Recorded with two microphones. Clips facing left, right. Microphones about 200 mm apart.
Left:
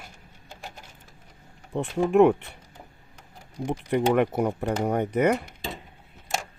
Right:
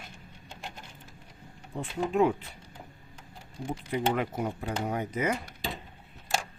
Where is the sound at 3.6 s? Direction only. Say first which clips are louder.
Left 6 dB; 65° left (ahead or behind).